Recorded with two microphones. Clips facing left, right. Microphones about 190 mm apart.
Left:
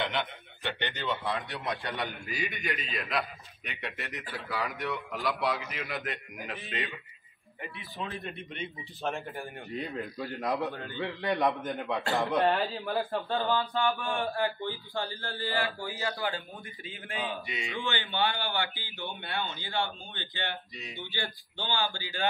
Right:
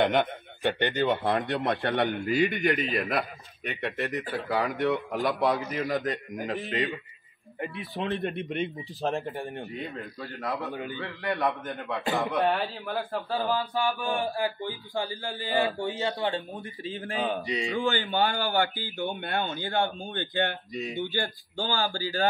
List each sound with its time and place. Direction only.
0.0 s speech: 45° right (ahead or behind)
4.3 s speech: 60° right (ahead or behind)
5.2 s speech: 45° right (ahead or behind)
8.2 s speech: 55° right (ahead or behind)
9.0 s speech: 35° right (ahead or behind)
9.7 s speech: centre (ahead or behind)
10.1 s a man's voice: 15° left (ahead or behind)
10.7 s a man's voice: 15° right (ahead or behind)
11.0 s a man's voice: 15° left (ahead or behind)
12.0 s a man's voice: 15° right (ahead or behind)
12.4 s speech: centre (ahead or behind)
13.4 s a man's voice: 15° right (ahead or behind)
16.3 s speech: 35° right (ahead or behind)